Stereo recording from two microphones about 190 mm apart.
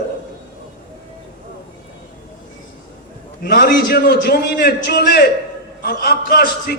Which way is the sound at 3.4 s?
55° left (ahead or behind).